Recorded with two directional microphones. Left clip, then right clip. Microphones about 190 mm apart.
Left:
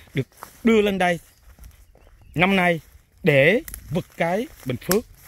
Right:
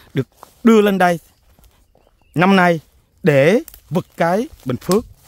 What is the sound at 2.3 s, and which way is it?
Speech, 45° right (ahead or behind).